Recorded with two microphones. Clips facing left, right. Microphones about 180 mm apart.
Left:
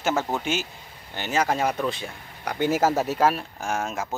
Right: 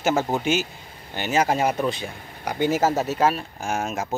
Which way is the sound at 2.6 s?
5° left (ahead or behind).